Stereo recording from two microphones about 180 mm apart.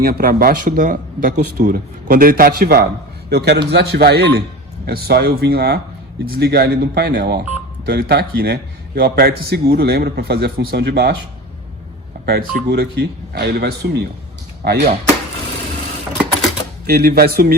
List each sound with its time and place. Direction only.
0.0 s a man's voice: 55° right (ahead or behind)
12.2 s a man's voice: 60° right (ahead or behind)
16.8 s a man's voice: 55° right (ahead or behind)